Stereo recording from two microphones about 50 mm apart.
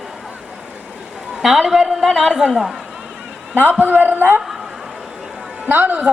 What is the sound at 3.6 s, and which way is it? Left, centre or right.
Speech, right.